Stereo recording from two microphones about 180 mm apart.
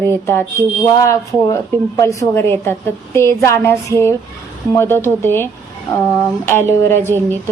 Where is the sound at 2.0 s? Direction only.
15° left (ahead or behind).